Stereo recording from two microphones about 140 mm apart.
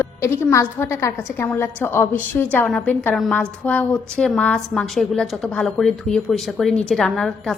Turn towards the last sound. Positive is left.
turn(degrees=0)  # may be behind; listen again after turning